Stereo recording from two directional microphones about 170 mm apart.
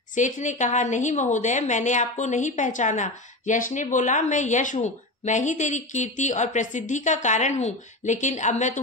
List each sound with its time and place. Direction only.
0.1 s a woman's voice: 45° left (ahead or behind)